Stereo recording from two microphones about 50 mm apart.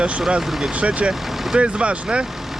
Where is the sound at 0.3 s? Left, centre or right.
Centre.